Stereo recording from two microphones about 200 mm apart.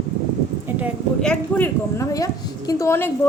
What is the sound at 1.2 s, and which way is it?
A woman's voice, 5° left (ahead or behind).